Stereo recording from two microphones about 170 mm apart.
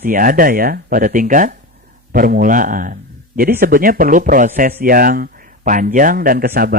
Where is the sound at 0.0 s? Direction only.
55° right (ahead or behind).